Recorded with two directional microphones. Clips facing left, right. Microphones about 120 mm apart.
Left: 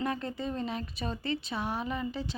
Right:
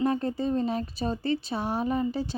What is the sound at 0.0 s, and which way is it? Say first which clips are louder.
Speech: right 7 dB; 35° right (ahead or behind).